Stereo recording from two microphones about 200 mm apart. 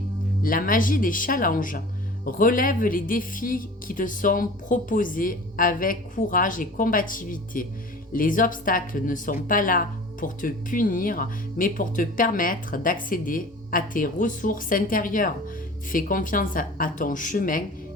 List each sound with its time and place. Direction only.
0.4 s speech: 45° left (ahead or behind)